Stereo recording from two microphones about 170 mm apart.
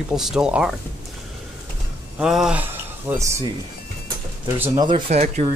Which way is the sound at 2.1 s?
5° right (ahead or behind).